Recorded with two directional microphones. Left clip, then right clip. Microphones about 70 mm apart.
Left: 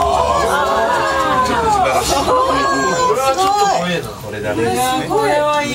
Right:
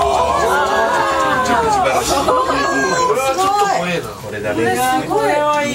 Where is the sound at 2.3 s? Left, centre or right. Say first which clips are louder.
Left 1 dB; centre.